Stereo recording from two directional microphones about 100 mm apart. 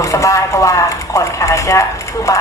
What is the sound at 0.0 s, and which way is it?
A man's voice, 35° left (ahead or behind).